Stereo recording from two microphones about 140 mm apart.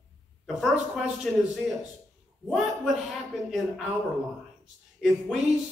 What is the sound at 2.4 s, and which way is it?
Speech, centre (ahead or behind).